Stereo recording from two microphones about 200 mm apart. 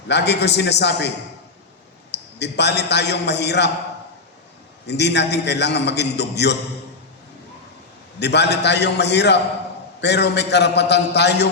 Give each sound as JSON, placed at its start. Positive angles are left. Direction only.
{"t": 0.1, "sound": "a man's voice", "side_deg": 60}
{"t": 2.1, "sound": "a man's voice", "side_deg": 60}
{"t": 4.9, "sound": "a man's voice", "side_deg": 60}
{"t": 8.2, "sound": "a man's voice", "side_deg": 55}